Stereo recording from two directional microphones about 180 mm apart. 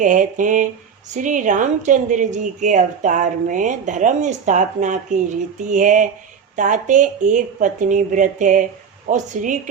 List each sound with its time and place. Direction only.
0.0 s speech: 45° right (ahead or behind)